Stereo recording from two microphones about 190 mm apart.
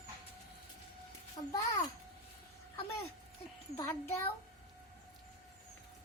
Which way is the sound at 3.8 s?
15° left (ahead or behind).